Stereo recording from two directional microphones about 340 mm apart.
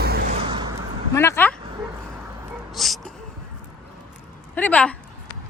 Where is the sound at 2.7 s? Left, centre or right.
Centre.